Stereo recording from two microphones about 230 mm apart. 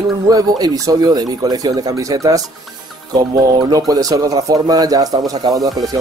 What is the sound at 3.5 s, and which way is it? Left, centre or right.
Speech, centre.